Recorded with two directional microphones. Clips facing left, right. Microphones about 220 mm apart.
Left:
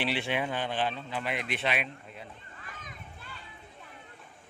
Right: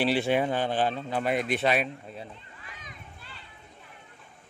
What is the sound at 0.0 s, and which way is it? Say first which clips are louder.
Speech: right 6 dB; 40° right (ahead or behind).